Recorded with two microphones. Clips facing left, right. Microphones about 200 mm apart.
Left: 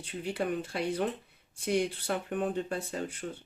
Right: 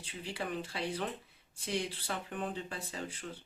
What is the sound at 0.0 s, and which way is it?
Speech, 55° left (ahead or behind).